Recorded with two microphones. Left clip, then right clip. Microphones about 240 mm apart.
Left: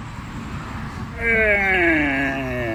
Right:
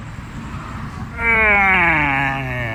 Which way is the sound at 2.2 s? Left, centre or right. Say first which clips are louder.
Right 3 dB; right.